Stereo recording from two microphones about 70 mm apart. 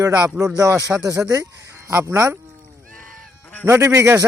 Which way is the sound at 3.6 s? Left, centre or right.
Right.